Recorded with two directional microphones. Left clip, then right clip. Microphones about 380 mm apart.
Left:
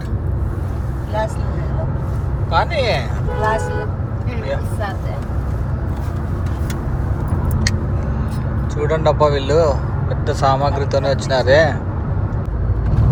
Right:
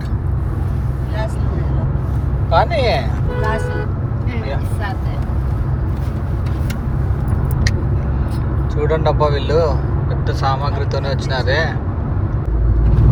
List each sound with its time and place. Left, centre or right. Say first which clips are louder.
2.5 s speech: right 2 dB; centre
8.8 s speech: left 1 dB; centre